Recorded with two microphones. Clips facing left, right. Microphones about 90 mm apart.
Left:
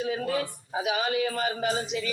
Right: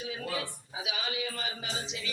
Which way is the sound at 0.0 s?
50° left (ahead or behind).